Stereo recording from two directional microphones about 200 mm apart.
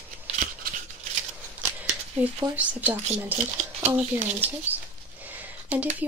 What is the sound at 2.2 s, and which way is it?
Speech, 5° right (ahead or behind).